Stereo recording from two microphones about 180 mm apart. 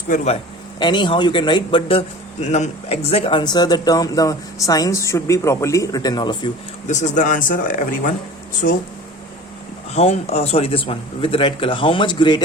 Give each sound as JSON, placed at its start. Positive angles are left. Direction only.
{"t": 0.8, "sound": "a man's voice", "side_deg": 25}
{"t": 6.8, "sound": "speech", "side_deg": 45}
{"t": 9.9, "sound": "a man's voice", "side_deg": 35}